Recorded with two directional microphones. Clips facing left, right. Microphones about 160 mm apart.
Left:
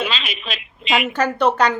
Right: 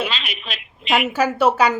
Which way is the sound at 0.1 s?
90° left.